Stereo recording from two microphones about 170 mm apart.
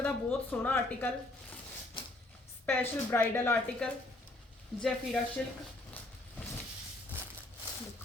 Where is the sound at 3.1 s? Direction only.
10° left (ahead or behind).